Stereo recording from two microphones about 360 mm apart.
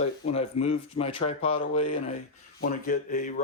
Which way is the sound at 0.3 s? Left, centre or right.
Centre.